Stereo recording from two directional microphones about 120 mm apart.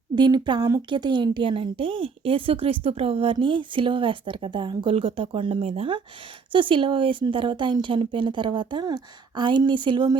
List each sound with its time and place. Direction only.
0.2 s a woman's voice: 40° right (ahead or behind)